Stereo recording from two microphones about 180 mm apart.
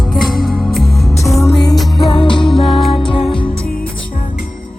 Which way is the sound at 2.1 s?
25° left (ahead or behind).